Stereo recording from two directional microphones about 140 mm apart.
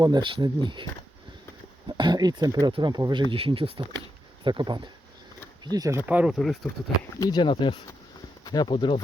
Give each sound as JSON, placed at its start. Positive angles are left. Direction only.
{"t": 0.0, "sound": "speech", "side_deg": -35}
{"t": 1.9, "sound": "speech", "side_deg": -30}
{"t": 7.2, "sound": "speech", "side_deg": 30}